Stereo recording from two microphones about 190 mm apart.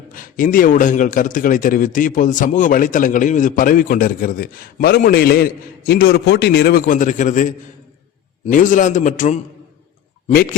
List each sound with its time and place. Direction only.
0.1 s a man's voice: 45° left (ahead or behind)
8.4 s a man's voice: 45° left (ahead or behind)